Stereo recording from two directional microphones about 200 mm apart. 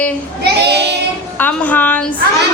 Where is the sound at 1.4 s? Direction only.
10° left (ahead or behind).